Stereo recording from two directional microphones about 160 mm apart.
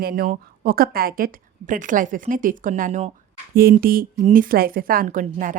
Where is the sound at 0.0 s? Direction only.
65° right (ahead or behind).